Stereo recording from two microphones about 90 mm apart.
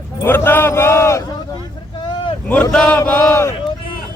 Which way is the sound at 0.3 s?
25° left (ahead or behind).